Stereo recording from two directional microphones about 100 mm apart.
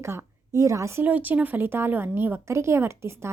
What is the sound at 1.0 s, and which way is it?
A woman's voice, 15° right (ahead or behind).